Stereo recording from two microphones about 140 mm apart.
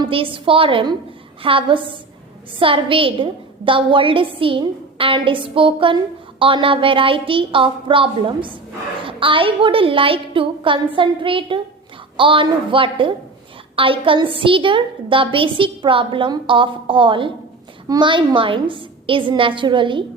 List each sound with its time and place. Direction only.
0.0 s a woman's voice: 40° right (ahead or behind)